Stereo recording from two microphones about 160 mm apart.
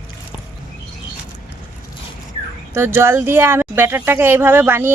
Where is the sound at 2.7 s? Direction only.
15° right (ahead or behind).